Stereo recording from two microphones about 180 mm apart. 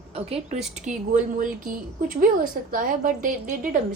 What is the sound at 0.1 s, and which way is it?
A woman's voice, 35° right (ahead or behind).